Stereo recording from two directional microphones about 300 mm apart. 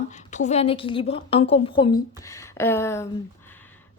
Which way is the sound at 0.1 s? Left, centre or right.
Left.